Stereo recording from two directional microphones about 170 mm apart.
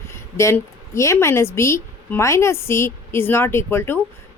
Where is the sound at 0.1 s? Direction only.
15° left (ahead or behind).